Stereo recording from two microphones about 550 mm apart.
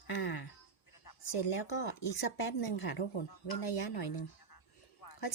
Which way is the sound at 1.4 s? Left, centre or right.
Left.